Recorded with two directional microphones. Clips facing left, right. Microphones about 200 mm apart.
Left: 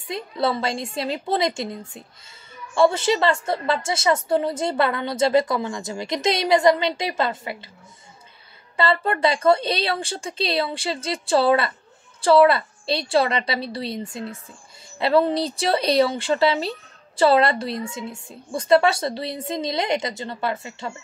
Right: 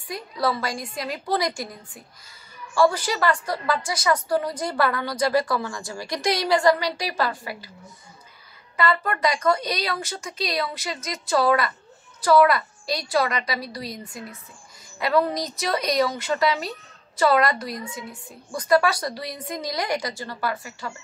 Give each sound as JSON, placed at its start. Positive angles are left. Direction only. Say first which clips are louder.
{"t": 0.1, "sound": "a woman's voice", "louder": "left 2 dB", "side_deg": 25}
{"t": 8.7, "sound": "a woman's voice", "louder": "left 2 dB", "side_deg": 30}